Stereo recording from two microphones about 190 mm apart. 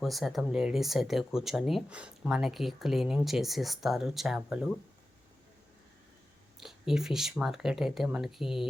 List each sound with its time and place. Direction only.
0.0 s speech: centre (ahead or behind)
6.6 s speech: centre (ahead or behind)